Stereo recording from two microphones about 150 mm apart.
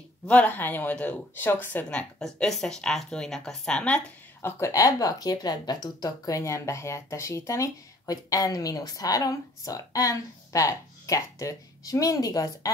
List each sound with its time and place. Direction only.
0.3 s speech: 10° left (ahead or behind)